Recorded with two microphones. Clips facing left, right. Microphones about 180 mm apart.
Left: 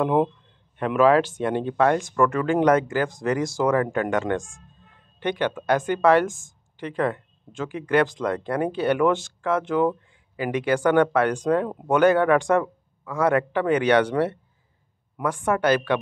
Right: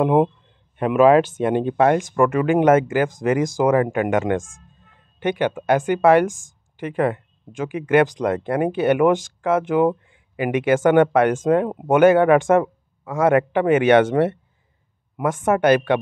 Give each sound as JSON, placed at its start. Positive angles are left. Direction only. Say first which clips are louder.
{"t": 0.0, "sound": "speech", "louder": "right 4 dB", "side_deg": -15}
{"t": 4.4, "sound": "speech", "louder": "right 4 dB", "side_deg": -90}
{"t": 5.2, "sound": "speech", "louder": "right 4 dB", "side_deg": -15}
{"t": 15.6, "sound": "a woman's voice", "louder": "right 5 dB", "side_deg": -55}